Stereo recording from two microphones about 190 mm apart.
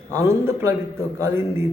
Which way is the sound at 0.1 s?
15° right (ahead or behind).